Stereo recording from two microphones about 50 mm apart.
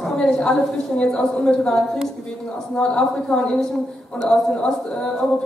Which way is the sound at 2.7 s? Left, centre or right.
Centre.